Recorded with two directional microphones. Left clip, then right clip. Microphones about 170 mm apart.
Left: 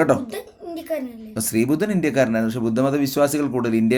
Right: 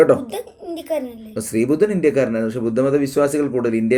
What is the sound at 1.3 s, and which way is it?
Speech, 45° left (ahead or behind).